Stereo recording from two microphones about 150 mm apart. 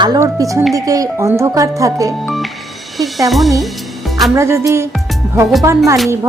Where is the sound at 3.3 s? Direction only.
Centre (ahead or behind).